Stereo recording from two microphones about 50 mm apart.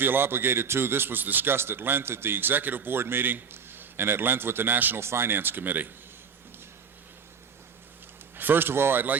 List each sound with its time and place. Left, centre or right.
0.0 s a man's voice: right
1.5 s a man's voice: right
4.9 s a man's voice: right
8.4 s a man's voice: right